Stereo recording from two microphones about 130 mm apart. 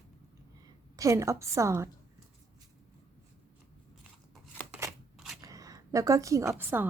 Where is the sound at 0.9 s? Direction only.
25° right (ahead or behind).